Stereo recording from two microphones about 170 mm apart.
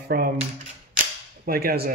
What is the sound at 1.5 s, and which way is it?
Speech, 65° right (ahead or behind).